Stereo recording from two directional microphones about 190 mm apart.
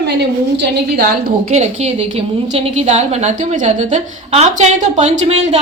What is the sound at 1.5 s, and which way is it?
A woman's voice, 35° right (ahead or behind).